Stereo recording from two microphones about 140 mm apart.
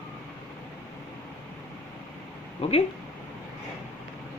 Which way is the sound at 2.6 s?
45° left (ahead or behind).